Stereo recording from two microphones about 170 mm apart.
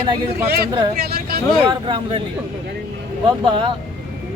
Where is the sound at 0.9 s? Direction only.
65° right (ahead or behind).